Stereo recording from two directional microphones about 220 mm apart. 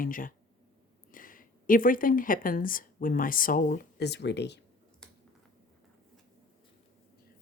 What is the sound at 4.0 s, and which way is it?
Speech, 50° left (ahead or behind).